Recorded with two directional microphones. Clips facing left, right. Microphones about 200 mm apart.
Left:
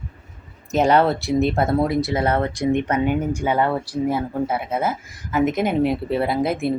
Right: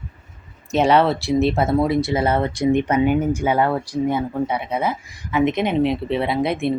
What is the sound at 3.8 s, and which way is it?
Speech, 5° left (ahead or behind).